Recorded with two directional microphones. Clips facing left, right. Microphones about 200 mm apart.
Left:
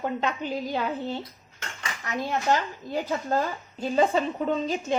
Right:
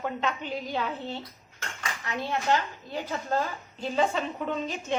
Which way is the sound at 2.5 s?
40° left (ahead or behind).